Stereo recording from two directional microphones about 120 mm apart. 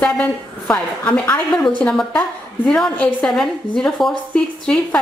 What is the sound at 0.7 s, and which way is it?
A woman's voice, 10° left (ahead or behind).